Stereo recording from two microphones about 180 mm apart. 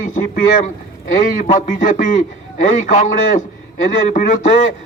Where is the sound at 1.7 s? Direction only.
45° left (ahead or behind).